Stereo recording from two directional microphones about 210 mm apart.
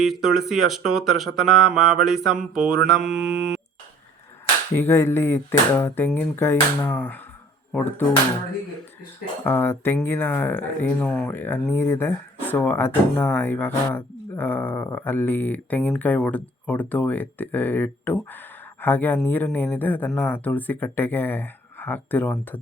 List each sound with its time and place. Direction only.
0.0 s speech: centre (ahead or behind)
3.1 s mantra: 65° right (ahead or behind)
4.7 s speech: 10° left (ahead or behind)
9.4 s speech: 10° left (ahead or behind)